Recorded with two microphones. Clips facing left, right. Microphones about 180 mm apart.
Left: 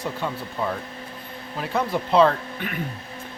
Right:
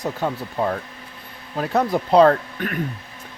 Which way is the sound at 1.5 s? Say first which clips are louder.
Right 4 dB; 45° right (ahead or behind).